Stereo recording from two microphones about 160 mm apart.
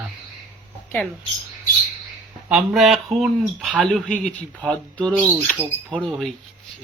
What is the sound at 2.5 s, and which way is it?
Speech, 5° right (ahead or behind).